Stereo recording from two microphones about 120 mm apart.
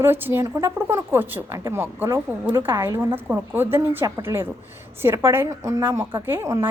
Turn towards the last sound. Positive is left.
turn(degrees=-25)  # may be behind; listen again after turning